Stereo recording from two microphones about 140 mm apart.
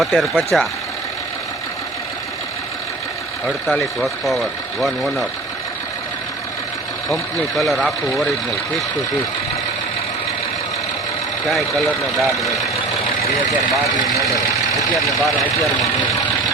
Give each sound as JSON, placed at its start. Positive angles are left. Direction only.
{"t": 0.0, "sound": "speech", "side_deg": 0}
{"t": 3.4, "sound": "speech", "side_deg": 0}
{"t": 7.1, "sound": "speech", "side_deg": 0}
{"t": 11.4, "sound": "speech", "side_deg": 0}
{"t": 14.3, "sound": "speech", "side_deg": 25}
{"t": 14.9, "sound": "speech", "side_deg": 0}